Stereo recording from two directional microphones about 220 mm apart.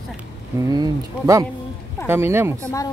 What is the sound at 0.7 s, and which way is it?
Speech, 15° right (ahead or behind).